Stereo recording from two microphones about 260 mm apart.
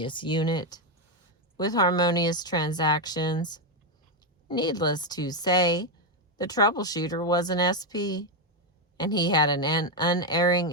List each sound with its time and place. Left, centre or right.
0.0 s speech: centre